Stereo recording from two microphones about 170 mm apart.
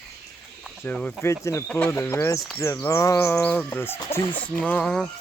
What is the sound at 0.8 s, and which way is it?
Speech, 10° left (ahead or behind).